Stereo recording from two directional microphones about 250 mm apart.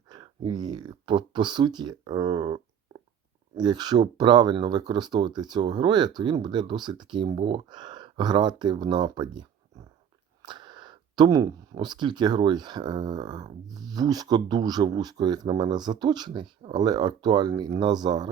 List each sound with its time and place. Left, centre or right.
0.1 s speech: centre
3.6 s speech: centre